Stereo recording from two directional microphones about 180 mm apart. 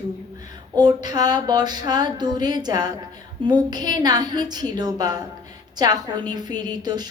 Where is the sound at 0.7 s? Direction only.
20° right (ahead or behind).